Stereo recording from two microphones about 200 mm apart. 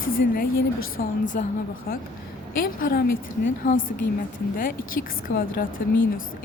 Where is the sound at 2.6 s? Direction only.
45° left (ahead or behind).